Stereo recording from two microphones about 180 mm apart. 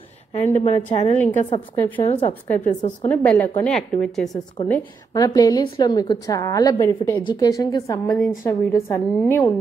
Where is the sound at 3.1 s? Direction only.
10° left (ahead or behind).